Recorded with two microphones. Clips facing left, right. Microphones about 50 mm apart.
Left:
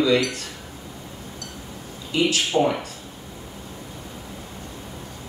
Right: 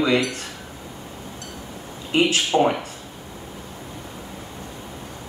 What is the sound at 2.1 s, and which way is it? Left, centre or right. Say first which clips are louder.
Speech: right 2 dB; right.